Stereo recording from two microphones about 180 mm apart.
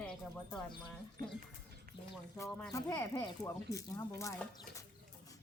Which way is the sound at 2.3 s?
15° left (ahead or behind).